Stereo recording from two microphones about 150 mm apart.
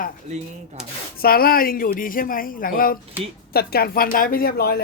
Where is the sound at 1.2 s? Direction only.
85° left.